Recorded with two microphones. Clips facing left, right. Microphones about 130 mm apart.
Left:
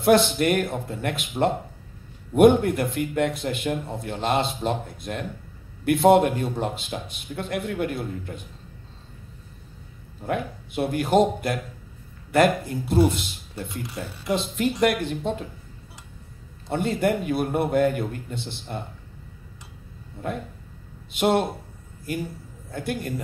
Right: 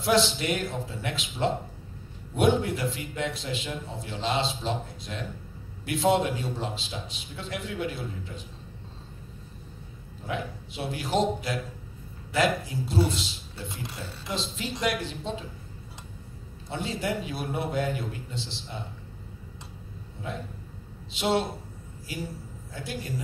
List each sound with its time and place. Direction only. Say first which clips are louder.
0.0 s a man's voice: left 6 dB; 55° left (ahead or behind)
10.2 s a man's voice: left 5 dB; 55° left (ahead or behind)
16.6 s a man's voice: left 8 dB; 55° left (ahead or behind)
20.2 s a man's voice: left 6 dB; 55° left (ahead or behind)